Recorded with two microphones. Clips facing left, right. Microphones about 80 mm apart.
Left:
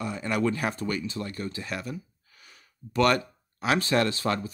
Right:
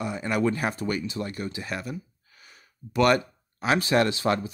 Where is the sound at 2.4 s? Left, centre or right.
Centre.